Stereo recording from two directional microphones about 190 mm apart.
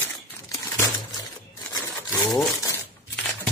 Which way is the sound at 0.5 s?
15° left (ahead or behind).